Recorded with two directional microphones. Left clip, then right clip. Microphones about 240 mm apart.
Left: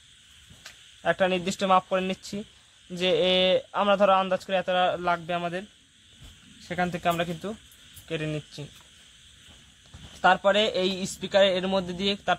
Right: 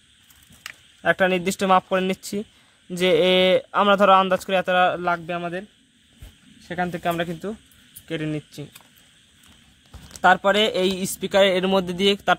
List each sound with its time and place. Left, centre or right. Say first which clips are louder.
1.0 s a man's voice: right 5 dB; right
6.7 s a man's voice: right 2 dB; right
10.2 s a man's voice: right 4 dB; right